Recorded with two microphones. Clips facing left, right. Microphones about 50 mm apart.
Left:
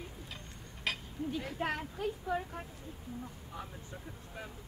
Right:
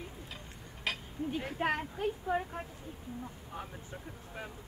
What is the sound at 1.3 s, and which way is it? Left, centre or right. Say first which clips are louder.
A woman's voice: right 3 dB; right.